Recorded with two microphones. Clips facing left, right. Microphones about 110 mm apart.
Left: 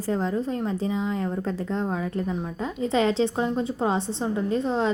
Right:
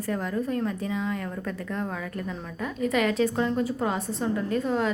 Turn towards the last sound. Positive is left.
turn(degrees=25)  # may be behind; listen again after turning